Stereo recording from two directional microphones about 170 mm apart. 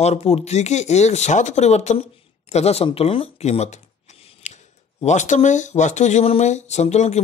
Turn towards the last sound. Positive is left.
turn(degrees=40)  # may be behind; listen again after turning